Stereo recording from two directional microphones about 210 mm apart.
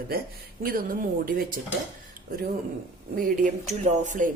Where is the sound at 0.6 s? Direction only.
45° right (ahead or behind).